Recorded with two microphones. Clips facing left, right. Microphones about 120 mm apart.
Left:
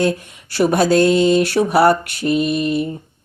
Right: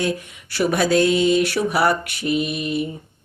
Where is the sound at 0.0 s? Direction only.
35° left (ahead or behind).